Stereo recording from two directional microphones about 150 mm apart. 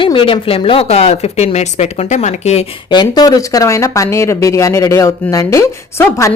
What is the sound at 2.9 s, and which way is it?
Speech, 30° left (ahead or behind).